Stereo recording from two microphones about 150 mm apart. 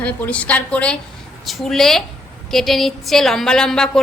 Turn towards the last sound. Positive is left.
turn(degrees=5)  # may be behind; listen again after turning